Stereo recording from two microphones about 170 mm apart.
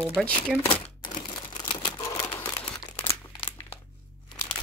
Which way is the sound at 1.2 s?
25° left (ahead or behind).